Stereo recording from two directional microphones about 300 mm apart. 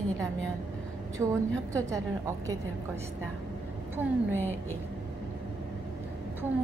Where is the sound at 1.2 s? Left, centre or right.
Centre.